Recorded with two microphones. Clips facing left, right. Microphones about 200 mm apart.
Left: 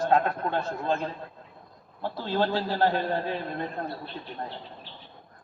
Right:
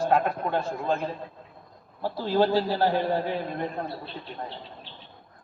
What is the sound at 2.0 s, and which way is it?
A man's voice, 10° right (ahead or behind).